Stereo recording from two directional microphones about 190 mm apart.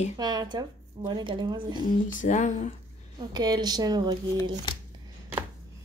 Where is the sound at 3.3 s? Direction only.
20° right (ahead or behind).